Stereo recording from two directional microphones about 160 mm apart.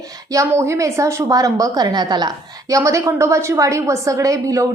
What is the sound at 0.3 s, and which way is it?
A woman's voice, 15° right (ahead or behind).